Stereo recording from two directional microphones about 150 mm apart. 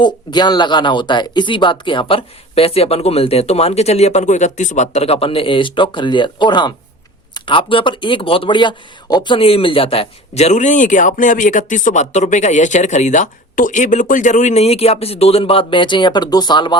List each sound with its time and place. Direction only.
0.0 s speech: 30° left (ahead or behind)